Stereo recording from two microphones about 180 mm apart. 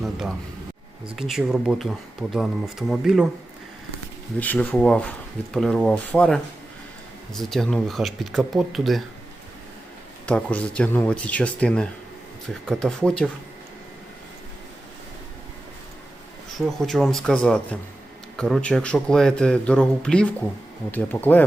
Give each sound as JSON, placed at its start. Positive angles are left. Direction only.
{"t": 0.0, "sound": "a sound", "side_deg": 0}
{"t": 1.0, "sound": "a man's voice", "side_deg": -5}
{"t": 4.4, "sound": "a man's voice", "side_deg": 10}
{"t": 10.2, "sound": "a man's voice", "side_deg": 5}
{"t": 16.6, "sound": "a man's voice", "side_deg": 0}